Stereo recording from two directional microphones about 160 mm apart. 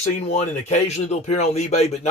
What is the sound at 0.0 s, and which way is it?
Speech, 45° left (ahead or behind).